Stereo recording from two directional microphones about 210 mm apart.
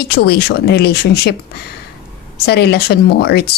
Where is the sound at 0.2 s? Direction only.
50° left (ahead or behind).